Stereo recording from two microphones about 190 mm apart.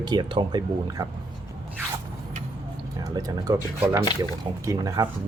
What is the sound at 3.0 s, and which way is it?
Speech, 20° right (ahead or behind).